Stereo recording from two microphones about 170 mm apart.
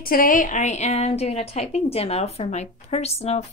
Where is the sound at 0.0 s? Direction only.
55° left (ahead or behind).